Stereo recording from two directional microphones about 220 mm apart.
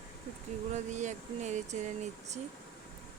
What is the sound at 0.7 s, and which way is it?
Speech, 30° right (ahead or behind).